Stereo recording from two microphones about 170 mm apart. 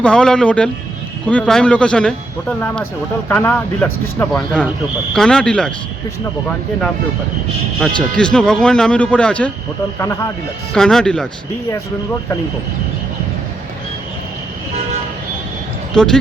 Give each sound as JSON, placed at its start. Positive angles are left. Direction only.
{"t": 0.0, "sound": "speech", "side_deg": 5}
{"t": 7.8, "sound": "speech", "side_deg": 5}
{"t": 10.0, "sound": "speech", "side_deg": 15}
{"t": 10.8, "sound": "speech", "side_deg": 5}